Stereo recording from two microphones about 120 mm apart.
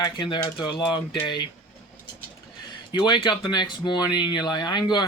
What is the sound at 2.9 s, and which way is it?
Speech, 35° left (ahead or behind).